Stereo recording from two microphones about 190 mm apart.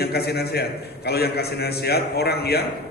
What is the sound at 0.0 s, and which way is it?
A man's voice, 55° left (ahead or behind).